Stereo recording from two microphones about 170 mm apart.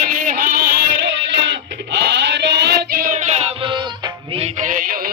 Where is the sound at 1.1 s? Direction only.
90° right.